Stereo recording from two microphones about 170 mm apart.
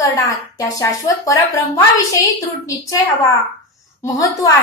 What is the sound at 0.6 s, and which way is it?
A woman's voice, 20° left (ahead or behind).